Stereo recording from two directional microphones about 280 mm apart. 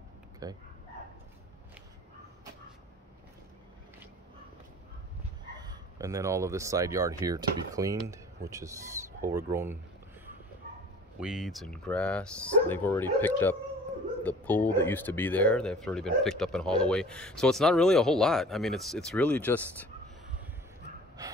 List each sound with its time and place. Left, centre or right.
0.4 s speech: centre
5.5 s speech: centre
11.1 s speech: centre